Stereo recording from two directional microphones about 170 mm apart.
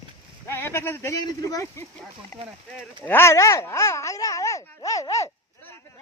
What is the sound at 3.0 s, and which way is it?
Speech, 15° left (ahead or behind).